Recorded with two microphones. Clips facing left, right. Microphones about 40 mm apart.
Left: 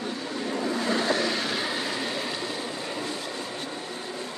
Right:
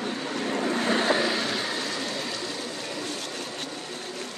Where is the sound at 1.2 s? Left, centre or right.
Centre.